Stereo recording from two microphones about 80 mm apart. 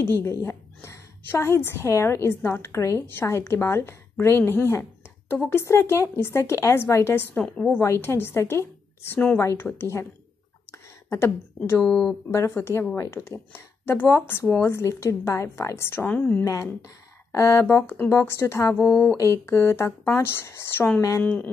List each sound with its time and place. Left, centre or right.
0.0 s a woman's voice: left
7.4 s speech: centre
7.8 s a woman's voice: left
10.7 s a sound: left
11.8 s speech: centre
12.3 s a woman's voice: left
14.4 s a woman's voice: left
14.7 s a woman's voice: left
16.8 s a woman's voice: left